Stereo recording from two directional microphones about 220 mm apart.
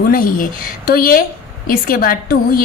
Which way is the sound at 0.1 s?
40° left (ahead or behind).